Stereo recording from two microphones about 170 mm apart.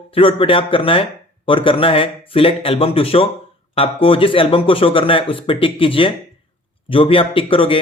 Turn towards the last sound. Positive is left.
turn(degrees=30)  # may be behind; listen again after turning